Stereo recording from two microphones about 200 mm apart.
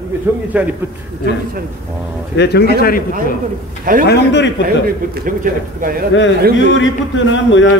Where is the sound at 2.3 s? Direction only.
55° left (ahead or behind).